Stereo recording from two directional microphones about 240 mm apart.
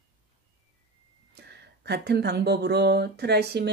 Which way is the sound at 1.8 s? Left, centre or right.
Right.